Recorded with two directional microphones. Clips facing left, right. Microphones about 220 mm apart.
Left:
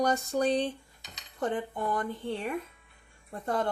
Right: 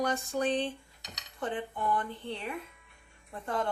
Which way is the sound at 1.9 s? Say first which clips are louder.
Even; 45° left (ahead or behind).